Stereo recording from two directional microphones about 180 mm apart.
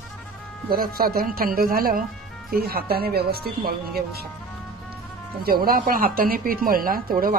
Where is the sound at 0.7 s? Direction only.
55° right (ahead or behind).